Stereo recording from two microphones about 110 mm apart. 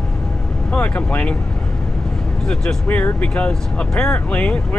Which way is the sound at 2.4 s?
10° left (ahead or behind).